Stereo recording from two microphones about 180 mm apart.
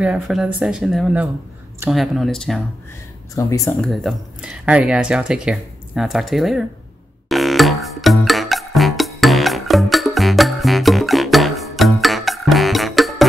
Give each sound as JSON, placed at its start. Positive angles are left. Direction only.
{"t": 0.0, "sound": "speech", "side_deg": -5}
{"t": 3.3, "sound": "speech", "side_deg": 15}
{"t": 3.8, "sound": "speech", "side_deg": 0}
{"t": 7.2, "sound": "music", "side_deg": 0}